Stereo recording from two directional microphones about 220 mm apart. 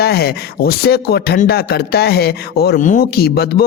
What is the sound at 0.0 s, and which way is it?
Speech, 45° left (ahead or behind).